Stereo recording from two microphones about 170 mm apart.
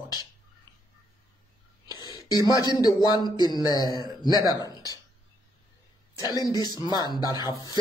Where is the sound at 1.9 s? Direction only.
25° left (ahead or behind).